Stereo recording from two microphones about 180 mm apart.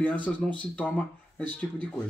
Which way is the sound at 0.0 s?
10° left (ahead or behind).